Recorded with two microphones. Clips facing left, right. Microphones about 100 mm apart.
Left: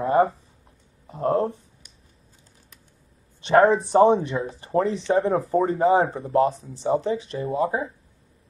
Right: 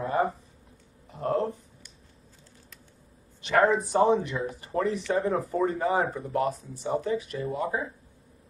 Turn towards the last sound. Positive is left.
turn(degrees=30)  # may be behind; listen again after turning